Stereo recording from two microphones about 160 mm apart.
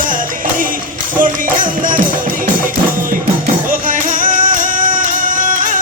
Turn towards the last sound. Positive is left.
turn(degrees=-55)  # may be behind; listen again after turning